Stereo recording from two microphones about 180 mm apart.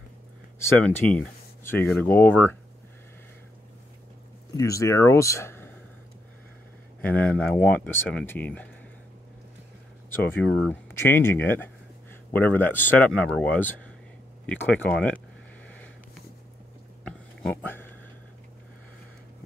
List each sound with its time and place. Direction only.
0.7 s speech: 5° left (ahead or behind)
4.6 s speech: 15° left (ahead or behind)
7.0 s speech: 10° left (ahead or behind)
10.0 s speech: 10° left (ahead or behind)
17.0 s a sound: 5° left (ahead or behind)